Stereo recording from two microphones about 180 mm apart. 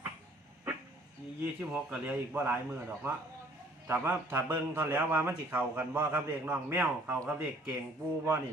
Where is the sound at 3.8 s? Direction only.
10° right (ahead or behind).